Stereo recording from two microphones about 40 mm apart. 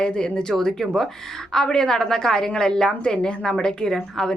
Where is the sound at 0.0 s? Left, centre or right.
Left.